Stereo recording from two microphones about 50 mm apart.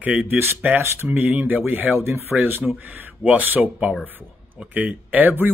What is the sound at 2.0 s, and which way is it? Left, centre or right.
Speech, right.